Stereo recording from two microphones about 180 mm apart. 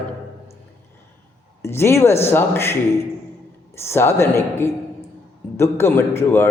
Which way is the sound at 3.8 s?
15° left (ahead or behind).